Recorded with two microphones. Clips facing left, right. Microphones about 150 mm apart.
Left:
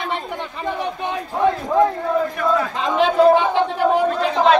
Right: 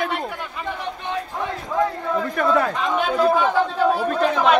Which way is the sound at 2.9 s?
25° left (ahead or behind).